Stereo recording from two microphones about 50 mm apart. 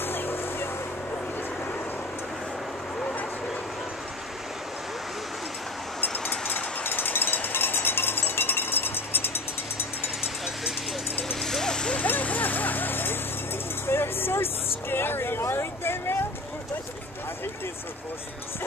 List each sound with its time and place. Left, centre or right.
0.0 s vehicle: left
6.4 s cowbell: left
11.4 s vehicle: centre
12.0 s a sound: left